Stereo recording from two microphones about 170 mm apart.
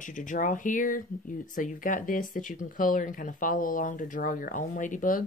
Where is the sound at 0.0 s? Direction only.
50° left (ahead or behind).